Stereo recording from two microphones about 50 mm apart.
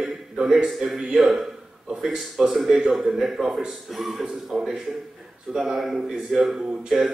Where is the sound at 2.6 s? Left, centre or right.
Right.